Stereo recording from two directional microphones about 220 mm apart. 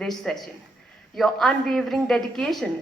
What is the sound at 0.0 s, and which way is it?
A woman's voice, centre (ahead or behind).